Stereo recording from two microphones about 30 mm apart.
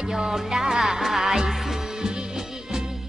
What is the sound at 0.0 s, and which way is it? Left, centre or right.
Music, centre.